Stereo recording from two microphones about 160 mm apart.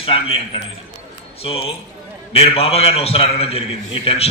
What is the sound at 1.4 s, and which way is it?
A man's voice, 35° left (ahead or behind).